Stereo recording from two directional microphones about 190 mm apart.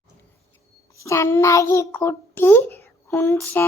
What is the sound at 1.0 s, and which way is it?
A child's voice, 15° left (ahead or behind).